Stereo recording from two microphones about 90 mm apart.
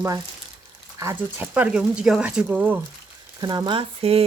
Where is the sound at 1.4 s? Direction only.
15° right (ahead or behind).